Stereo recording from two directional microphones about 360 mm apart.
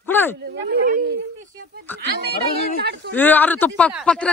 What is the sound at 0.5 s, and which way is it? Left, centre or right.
Speech, right.